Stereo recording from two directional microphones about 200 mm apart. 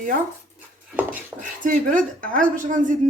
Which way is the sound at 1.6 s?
40° right (ahead or behind).